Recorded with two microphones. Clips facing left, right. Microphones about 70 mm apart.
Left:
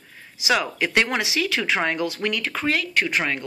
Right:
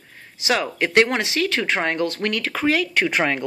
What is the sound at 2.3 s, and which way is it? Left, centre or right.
Speech, right.